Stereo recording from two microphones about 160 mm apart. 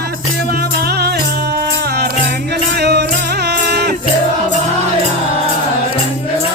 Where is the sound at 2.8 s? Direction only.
90° right.